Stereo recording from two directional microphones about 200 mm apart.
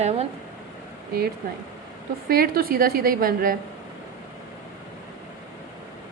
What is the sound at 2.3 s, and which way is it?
A woman's voice, 45° right (ahead or behind).